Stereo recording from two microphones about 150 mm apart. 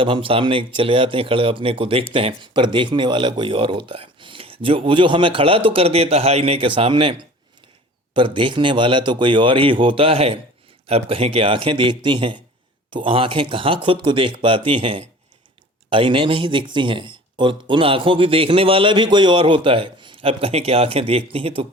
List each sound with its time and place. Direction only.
0.0 s speech: 35° right (ahead or behind)